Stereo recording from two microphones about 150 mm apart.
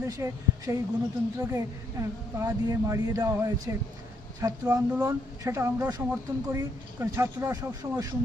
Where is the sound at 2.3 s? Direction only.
20° right (ahead or behind).